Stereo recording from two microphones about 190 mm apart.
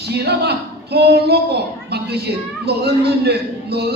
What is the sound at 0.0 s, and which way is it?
Speech, 60° right (ahead or behind).